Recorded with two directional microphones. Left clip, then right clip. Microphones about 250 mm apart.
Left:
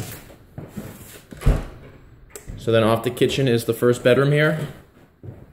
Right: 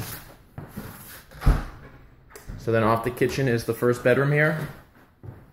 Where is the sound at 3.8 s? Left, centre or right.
Centre.